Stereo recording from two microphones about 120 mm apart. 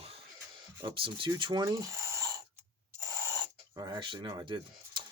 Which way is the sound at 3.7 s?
35° right (ahead or behind).